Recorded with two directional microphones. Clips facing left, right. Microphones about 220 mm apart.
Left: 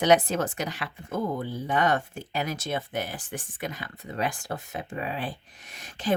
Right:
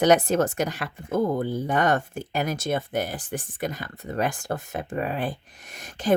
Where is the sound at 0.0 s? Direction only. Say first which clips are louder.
Right 3 dB; 45° right (ahead or behind).